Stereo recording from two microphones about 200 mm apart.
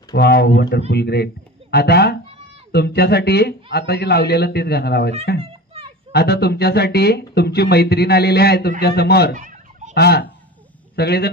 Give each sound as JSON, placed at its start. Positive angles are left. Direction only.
{"t": 0.1, "sound": "speech", "side_deg": 55}
{"t": 6.1, "sound": "speech", "side_deg": 55}
{"t": 9.4, "sound": "fowl", "side_deg": -40}
{"t": 9.9, "sound": "speech", "side_deg": 55}